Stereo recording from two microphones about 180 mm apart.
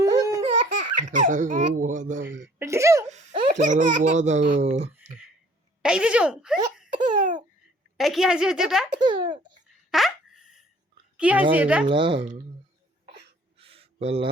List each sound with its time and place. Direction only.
0.0 s laughter: 20° right (ahead or behind)
0.6 s speech: 45° right (ahead or behind)
2.6 s speech: 15° right (ahead or behind)
3.1 s speech: 40° right (ahead or behind)
5.8 s a woman's voice: 5° right (ahead or behind)
6.9 s baby laughter: 45° right (ahead or behind)
7.9 s a woman's voice: centre (ahead or behind)
9.9 s a sound: centre (ahead or behind)
11.2 s speech: 10° right (ahead or behind)
11.9 s speech: 30° right (ahead or behind)
13.6 s a sound: 30° right (ahead or behind)